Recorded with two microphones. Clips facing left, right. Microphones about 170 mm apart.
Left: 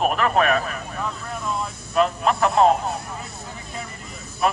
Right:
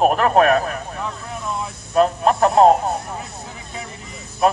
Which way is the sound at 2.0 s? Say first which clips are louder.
Right 4 dB; 40° right (ahead or behind).